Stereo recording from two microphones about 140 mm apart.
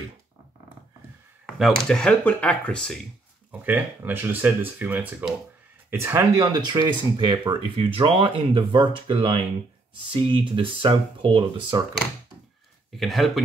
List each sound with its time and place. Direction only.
1.4 s speech: centre (ahead or behind)
3.6 s speech: 10° right (ahead or behind)
6.4 s speech: 30° right (ahead or behind)
12.9 s speech: centre (ahead or behind)